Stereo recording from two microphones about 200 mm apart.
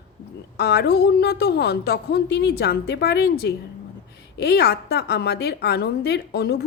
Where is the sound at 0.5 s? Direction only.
55° left (ahead or behind).